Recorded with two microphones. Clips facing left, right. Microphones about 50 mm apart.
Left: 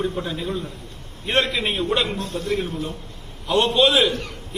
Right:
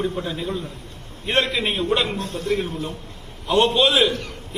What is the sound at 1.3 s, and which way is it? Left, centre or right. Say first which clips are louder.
A man's voice: even; right.